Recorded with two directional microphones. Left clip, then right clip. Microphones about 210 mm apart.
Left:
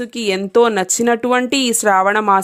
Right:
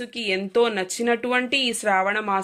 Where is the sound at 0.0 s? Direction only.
55° left (ahead or behind).